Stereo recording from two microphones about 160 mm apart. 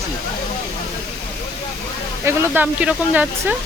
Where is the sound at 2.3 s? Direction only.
10° right (ahead or behind).